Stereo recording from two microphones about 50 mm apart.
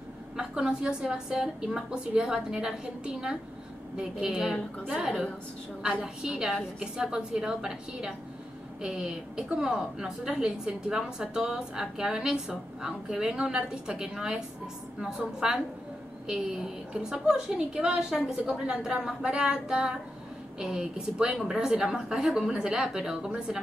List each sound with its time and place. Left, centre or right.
0.4 s a woman's voice: centre
4.8 s a woman's voice: right
6.2 s a woman's voice: centre